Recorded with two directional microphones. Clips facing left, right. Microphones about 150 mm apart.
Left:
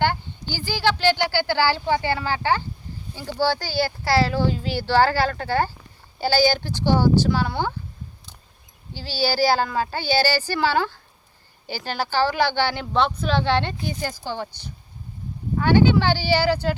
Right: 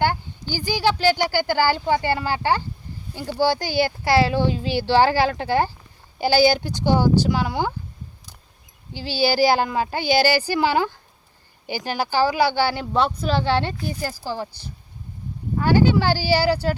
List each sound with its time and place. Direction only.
0.5 s speech: 10° right (ahead or behind)
8.9 s speech: 15° right (ahead or behind)
15.5 s speech: 5° right (ahead or behind)